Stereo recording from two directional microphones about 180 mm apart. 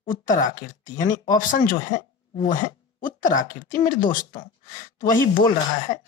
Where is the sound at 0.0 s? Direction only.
45° left (ahead or behind).